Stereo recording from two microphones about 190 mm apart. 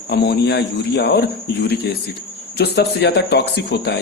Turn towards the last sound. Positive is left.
turn(degrees=60)  # may be behind; listen again after turning